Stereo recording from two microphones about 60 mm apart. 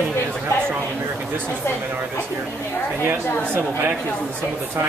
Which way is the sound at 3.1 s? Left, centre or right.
Right.